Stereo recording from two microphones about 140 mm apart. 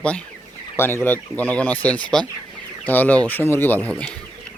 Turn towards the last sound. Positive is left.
turn(degrees=10)  # may be behind; listen again after turning